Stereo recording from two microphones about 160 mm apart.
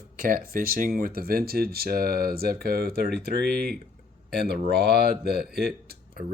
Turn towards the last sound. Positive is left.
turn(degrees=-80)